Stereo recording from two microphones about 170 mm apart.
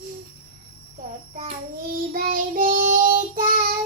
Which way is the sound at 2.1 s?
55° right (ahead or behind).